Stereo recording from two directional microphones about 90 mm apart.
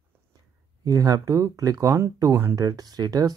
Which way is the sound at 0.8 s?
40° right (ahead or behind).